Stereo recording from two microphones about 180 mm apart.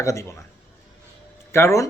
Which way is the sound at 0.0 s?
15° left (ahead or behind).